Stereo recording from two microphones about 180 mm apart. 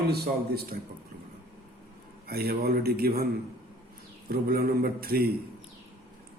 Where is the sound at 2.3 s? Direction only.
60° right (ahead or behind).